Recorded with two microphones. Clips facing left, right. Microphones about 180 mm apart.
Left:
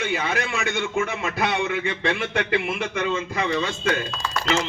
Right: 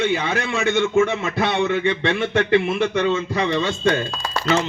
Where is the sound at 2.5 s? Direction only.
35° right (ahead or behind).